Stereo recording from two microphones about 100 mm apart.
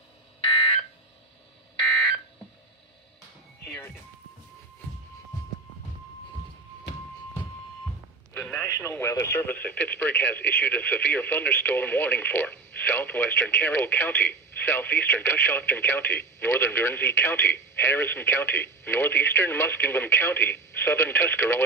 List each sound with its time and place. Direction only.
0.4 s alarm: 75° left (ahead or behind)
3.7 s music: 15° left (ahead or behind)
8.3 s a sound: 15° left (ahead or behind)
8.6 s speech: 25° left (ahead or behind)
9.5 s speech: 15° left (ahead or behind)